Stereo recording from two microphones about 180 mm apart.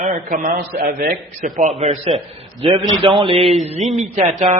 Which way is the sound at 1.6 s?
40° right (ahead or behind).